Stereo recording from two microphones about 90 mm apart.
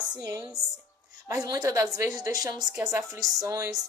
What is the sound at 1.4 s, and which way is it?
Speech, 45° right (ahead or behind).